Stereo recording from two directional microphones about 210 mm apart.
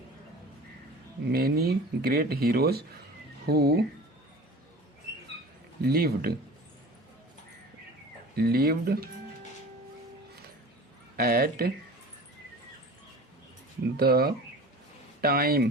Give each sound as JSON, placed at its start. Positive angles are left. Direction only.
{"t": 1.3, "sound": "speech", "side_deg": -45}
{"t": 5.8, "sound": "speech", "side_deg": -45}
{"t": 8.4, "sound": "speech", "side_deg": -45}
{"t": 11.2, "sound": "speech", "side_deg": -45}
{"t": 13.9, "sound": "speech", "side_deg": -45}